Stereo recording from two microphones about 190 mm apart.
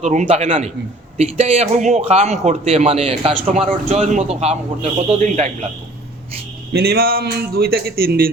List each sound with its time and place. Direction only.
0.0 s a man's voice: 40° right (ahead or behind)
6.7 s speech: 55° right (ahead or behind)